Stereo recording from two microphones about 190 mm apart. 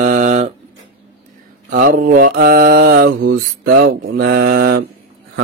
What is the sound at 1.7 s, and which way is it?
Mantra, 45° right (ahead or behind).